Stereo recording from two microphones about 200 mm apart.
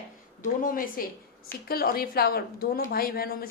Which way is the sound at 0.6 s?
45° left (ahead or behind).